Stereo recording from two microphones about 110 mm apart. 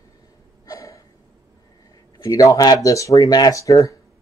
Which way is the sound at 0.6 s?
30° left (ahead or behind).